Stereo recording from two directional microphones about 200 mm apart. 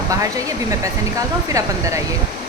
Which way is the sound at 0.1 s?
15° right (ahead or behind).